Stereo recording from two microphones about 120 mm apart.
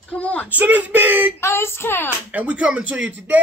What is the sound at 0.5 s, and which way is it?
Speech, 15° right (ahead or behind).